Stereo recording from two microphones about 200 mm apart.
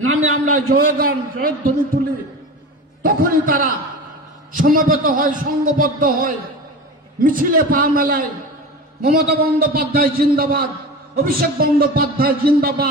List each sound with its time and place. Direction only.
0.0 s a man's voice: 90° right
0.7 s a man's voice: 45° right (ahead or behind)
3.0 s a man's voice: 45° right (ahead or behind)
9.3 s a man's voice: 50° right (ahead or behind)